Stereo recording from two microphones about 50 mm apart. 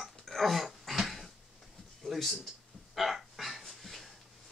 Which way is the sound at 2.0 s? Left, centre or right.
Centre.